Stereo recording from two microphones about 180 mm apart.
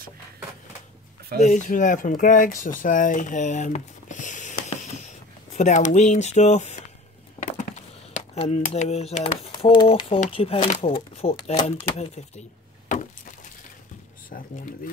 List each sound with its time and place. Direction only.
1.4 s speech: 45° left (ahead or behind)
12.8 s a sound: 45° left (ahead or behind)
14.3 s speech: 50° left (ahead or behind)